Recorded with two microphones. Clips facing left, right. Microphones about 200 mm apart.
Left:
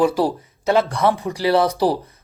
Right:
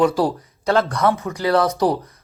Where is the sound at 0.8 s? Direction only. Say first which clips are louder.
Even; 30° left (ahead or behind).